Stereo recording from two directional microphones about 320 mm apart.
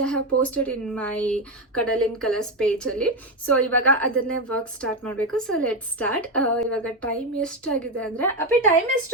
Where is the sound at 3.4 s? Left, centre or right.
Right.